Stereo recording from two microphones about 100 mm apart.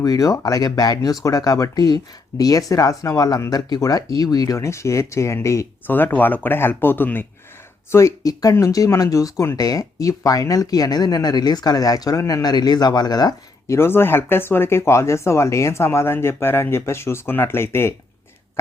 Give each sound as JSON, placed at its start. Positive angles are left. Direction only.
{"t": 0.0, "sound": "speech", "side_deg": 35}
{"t": 4.5, "sound": "speech", "side_deg": 30}
{"t": 5.9, "sound": "speech", "side_deg": 20}
{"t": 13.7, "sound": "speech", "side_deg": 25}